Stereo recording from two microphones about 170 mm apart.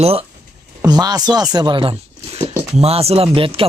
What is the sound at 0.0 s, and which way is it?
Speech, 35° right (ahead or behind).